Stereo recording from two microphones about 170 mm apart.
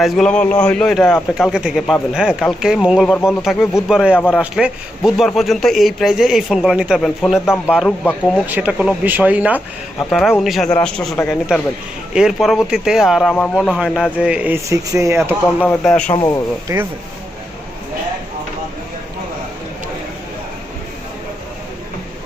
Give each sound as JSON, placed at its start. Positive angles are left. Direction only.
{"t": 0.0, "sound": "a man's voice", "side_deg": 5}
{"t": 10.1, "sound": "a man's voice", "side_deg": 0}
{"t": 15.6, "sound": "a man's voice", "side_deg": 5}
{"t": 16.1, "sound": "speech", "side_deg": 20}